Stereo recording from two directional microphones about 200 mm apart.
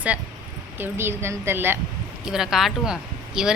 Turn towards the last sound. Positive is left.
turn(degrees=-5)  # may be behind; listen again after turning